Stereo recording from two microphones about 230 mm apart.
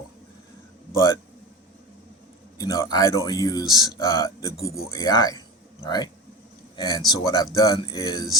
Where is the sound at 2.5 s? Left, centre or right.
Centre.